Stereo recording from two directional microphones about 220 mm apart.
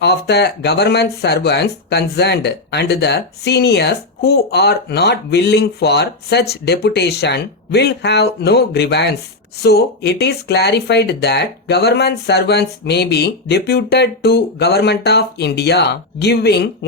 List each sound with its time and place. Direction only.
0.0 s speech: 50° left (ahead or behind)